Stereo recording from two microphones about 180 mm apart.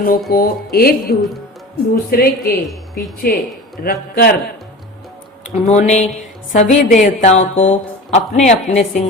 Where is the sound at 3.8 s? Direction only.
60° left (ahead or behind).